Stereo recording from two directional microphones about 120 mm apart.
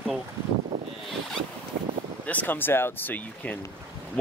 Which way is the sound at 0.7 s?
35° right (ahead or behind).